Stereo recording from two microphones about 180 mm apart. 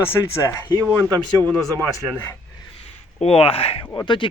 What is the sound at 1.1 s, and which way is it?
Speech, 20° right (ahead or behind).